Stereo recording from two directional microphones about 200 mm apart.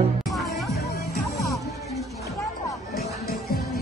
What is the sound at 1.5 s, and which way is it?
Music, centre (ahead or behind).